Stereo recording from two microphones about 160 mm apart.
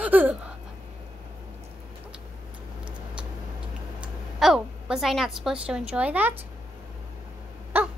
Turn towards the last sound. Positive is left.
turn(degrees=-10)  # may be behind; listen again after turning